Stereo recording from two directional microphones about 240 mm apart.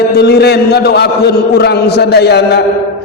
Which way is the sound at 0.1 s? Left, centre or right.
Left.